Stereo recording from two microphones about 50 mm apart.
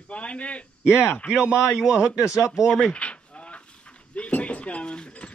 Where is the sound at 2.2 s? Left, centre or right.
Left.